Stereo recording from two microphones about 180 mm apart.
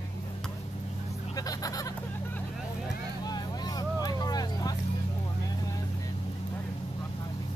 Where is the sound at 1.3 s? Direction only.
20° left (ahead or behind).